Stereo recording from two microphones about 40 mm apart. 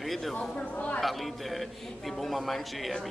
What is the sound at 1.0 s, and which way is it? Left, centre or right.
Speech, centre.